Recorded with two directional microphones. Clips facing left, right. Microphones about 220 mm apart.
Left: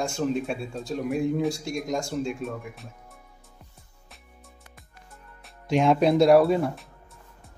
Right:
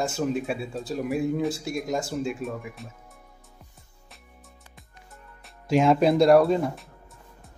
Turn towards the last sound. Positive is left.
turn(degrees=0)  # may be behind; listen again after turning